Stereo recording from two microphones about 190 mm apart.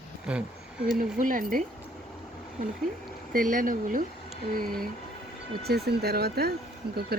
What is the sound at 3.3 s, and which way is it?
Speech, 45° right (ahead or behind).